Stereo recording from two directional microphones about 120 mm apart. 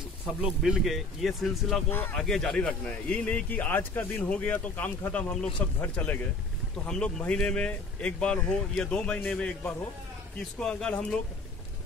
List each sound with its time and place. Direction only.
0.4 s speech: 5° right (ahead or behind)
1.9 s a man's voice: 15° left (ahead or behind)
2.1 s a man's voice: 5° left (ahead or behind)
10.6 s a man's voice: 10° left (ahead or behind)